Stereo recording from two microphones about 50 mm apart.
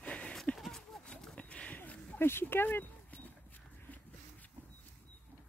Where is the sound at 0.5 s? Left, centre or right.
Centre.